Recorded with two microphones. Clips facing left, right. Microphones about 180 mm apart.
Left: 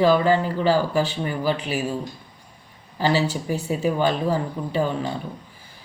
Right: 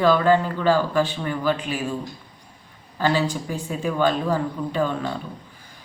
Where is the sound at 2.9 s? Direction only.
10° left (ahead or behind).